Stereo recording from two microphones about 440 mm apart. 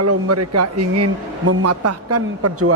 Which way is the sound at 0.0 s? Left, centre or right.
Right.